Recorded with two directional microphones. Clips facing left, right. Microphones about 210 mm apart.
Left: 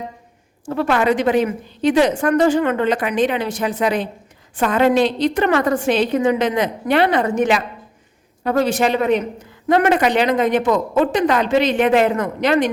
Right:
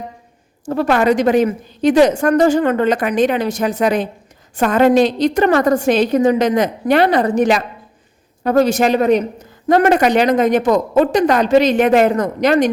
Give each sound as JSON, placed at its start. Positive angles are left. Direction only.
{"t": 0.6, "sound": "a man's voice", "side_deg": -40}